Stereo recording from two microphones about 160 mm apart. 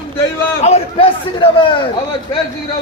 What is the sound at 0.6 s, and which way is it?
Speech, 40° left (ahead or behind).